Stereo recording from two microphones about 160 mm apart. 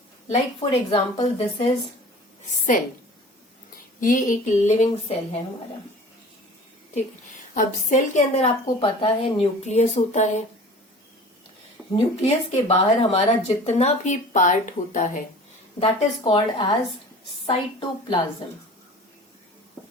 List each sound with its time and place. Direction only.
0.3 s a woman's voice: 40° left (ahead or behind)
2.4 s a woman's voice: 55° left (ahead or behind)
4.0 s speech: 55° left (ahead or behind)
7.5 s speech: 50° left (ahead or behind)
8.8 s speech: 35° left (ahead or behind)
11.9 s speech: 35° left (ahead or behind); by 15.2 s 55° left (ahead or behind)
15.8 s a woman's voice: 30° left (ahead or behind)